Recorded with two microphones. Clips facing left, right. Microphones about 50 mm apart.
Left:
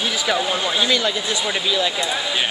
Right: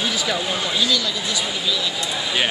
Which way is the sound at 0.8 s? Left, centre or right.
Left.